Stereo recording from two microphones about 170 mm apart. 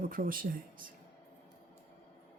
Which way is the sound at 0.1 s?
55° right (ahead or behind).